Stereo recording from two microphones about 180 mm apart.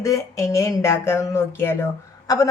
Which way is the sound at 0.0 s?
15° left (ahead or behind).